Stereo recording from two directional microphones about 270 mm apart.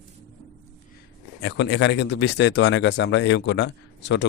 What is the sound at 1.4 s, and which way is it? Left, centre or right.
A man's voice, left.